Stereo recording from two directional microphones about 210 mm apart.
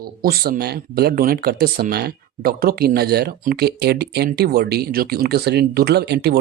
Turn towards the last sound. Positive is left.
turn(degrees=-50)  # may be behind; listen again after turning